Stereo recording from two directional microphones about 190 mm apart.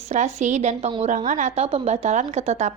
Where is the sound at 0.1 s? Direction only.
40° right (ahead or behind).